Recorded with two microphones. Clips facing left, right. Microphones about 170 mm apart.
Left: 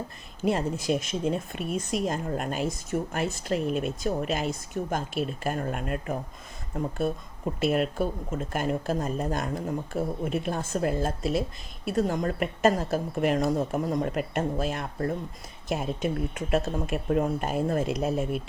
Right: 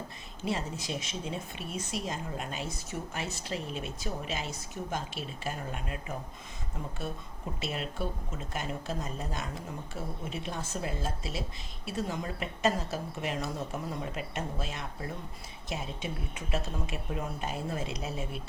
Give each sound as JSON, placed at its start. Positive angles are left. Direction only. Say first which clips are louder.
{"t": 0.4, "sound": "a woman's voice", "louder": "left 8 dB", "side_deg": 50}
{"t": 7.6, "sound": "a woman's voice", "louder": "left 10 dB", "side_deg": 55}